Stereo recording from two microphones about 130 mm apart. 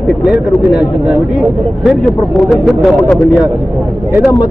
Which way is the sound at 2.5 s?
Centre (ahead or behind).